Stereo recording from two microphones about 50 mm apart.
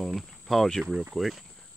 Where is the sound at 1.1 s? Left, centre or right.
Centre.